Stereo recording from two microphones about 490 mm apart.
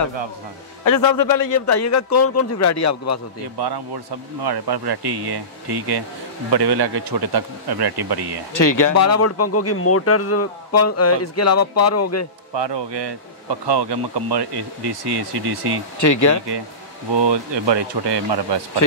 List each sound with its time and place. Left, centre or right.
0.8 s speech: left
3.5 s speech: right
8.5 s speech: left
12.5 s speech: right
16.0 s speech: left
17.1 s speech: right
18.8 s speech: left